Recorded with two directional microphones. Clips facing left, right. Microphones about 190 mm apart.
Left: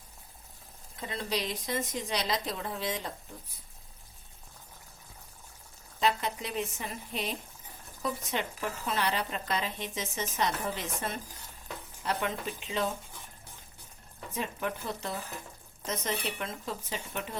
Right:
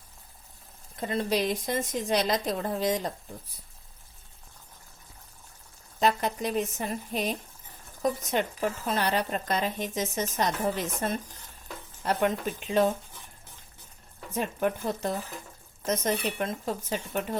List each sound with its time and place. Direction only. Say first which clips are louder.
0.9 s a woman's voice: right 7 dB; 50° right (ahead or behind)
6.0 s a woman's voice: right 4 dB; 45° right (ahead or behind)
12.0 s a woman's voice: right 6 dB; 45° right (ahead or behind)
14.3 s a woman's voice: right 6 dB; 45° right (ahead or behind)